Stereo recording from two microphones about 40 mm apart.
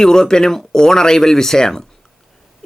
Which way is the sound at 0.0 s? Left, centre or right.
Centre.